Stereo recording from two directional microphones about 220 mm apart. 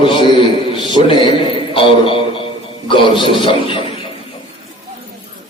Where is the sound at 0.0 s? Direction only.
20° left (ahead or behind).